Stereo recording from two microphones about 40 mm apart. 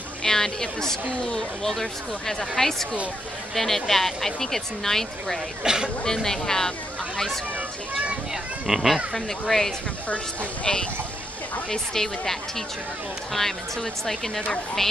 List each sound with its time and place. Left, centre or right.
0.2 s speech: centre
5.6 s speech: centre
6.0 s speech: centre
8.6 s speech: centre
8.9 s speech: centre
10.0 s speech: left
11.7 s speech: centre